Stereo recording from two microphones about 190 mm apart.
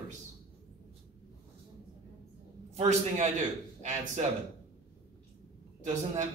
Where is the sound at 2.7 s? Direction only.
40° right (ahead or behind).